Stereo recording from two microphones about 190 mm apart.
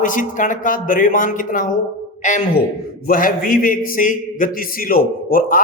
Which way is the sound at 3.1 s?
45° left (ahead or behind).